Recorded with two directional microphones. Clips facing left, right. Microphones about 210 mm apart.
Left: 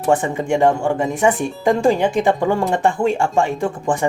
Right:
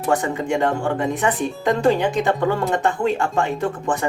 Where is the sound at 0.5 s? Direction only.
25° left (ahead or behind).